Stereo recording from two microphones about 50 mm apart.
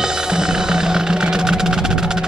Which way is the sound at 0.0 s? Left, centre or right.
Centre.